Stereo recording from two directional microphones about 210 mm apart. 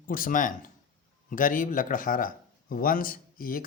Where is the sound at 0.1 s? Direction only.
40° left (ahead or behind).